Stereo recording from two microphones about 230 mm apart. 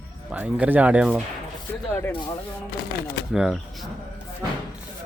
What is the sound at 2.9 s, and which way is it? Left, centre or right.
Speech, left.